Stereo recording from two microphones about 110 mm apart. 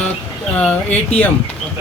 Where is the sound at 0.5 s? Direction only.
15° left (ahead or behind).